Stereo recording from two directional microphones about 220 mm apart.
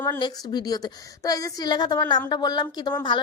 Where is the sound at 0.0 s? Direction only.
20° left (ahead or behind).